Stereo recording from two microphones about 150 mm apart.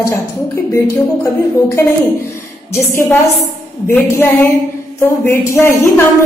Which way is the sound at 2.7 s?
20° left (ahead or behind).